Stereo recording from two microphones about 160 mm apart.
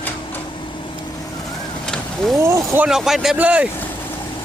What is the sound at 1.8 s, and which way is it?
Vehicle, centre (ahead or behind).